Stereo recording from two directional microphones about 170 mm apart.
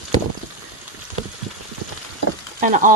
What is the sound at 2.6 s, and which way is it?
Speech, 50° right (ahead or behind).